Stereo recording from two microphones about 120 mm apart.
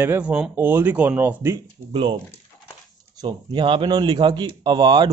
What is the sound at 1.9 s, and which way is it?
Speech, 40° right (ahead or behind).